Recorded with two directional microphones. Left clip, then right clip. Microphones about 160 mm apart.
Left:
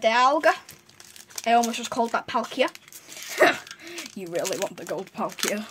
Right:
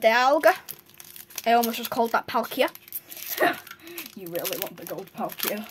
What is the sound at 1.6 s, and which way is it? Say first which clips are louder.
Speech: even; 15° right (ahead or behind).